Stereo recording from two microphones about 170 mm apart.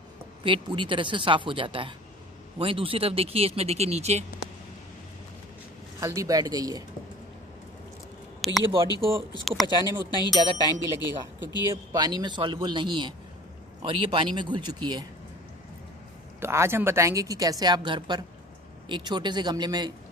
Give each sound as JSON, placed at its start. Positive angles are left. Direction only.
{"t": 0.4, "sound": "a woman's voice", "side_deg": -30}
{"t": 5.9, "sound": "a woman's voice", "side_deg": -20}
{"t": 8.4, "sound": "speech", "side_deg": 0}
{"t": 9.0, "sound": "speech", "side_deg": -30}
{"t": 9.4, "sound": "speech", "side_deg": 0}
{"t": 9.8, "sound": "speech", "side_deg": 25}
{"t": 11.6, "sound": "a woman's voice", "side_deg": -20}
{"t": 16.3, "sound": "a woman's voice", "side_deg": -15}